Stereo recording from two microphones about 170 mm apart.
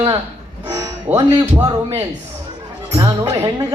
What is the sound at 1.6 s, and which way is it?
A man's voice, 25° right (ahead or behind).